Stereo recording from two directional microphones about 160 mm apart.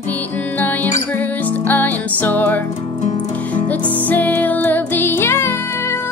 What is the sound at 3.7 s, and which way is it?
Music, 10° left (ahead or behind).